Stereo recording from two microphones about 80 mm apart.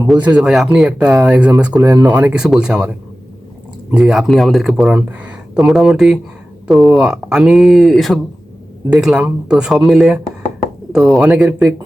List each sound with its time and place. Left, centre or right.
0.2 s speech: centre
0.4 s speech: centre
3.9 s speech: centre
4.9 s speech: right
5.5 s speech: centre
8.9 s speech: centre